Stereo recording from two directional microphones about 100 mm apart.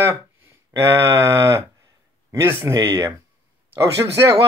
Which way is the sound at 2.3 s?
25° right (ahead or behind).